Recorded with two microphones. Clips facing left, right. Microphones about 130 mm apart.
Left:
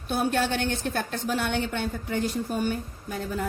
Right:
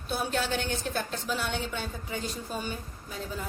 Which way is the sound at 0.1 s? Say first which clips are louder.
Left 5 dB; 55° left (ahead or behind).